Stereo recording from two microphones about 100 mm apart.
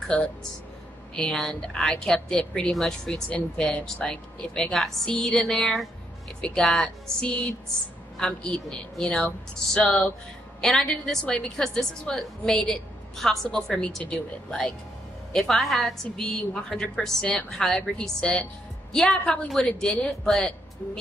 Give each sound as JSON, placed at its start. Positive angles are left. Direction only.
{"t": 0.1, "sound": "speech", "side_deg": 10}
{"t": 10.6, "sound": "a woman's voice", "side_deg": 5}